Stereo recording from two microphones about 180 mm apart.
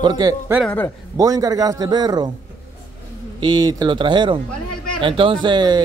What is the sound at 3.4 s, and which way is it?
Speech, 25° right (ahead or behind).